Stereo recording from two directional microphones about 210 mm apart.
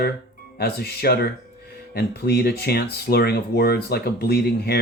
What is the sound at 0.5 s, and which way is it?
Speech, 50° left (ahead or behind).